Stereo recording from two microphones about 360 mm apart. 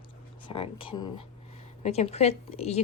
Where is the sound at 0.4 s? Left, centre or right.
Centre.